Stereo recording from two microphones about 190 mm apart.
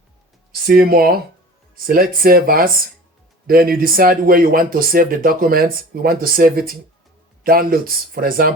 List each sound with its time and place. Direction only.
0.6 s speech: 50° right (ahead or behind)